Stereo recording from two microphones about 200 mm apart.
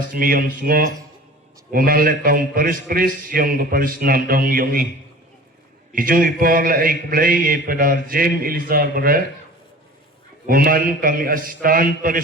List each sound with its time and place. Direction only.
0.1 s a man's voice: 45° right (ahead or behind)
5.9 s a man's voice: 45° right (ahead or behind)
10.4 s a man's voice: 45° right (ahead or behind)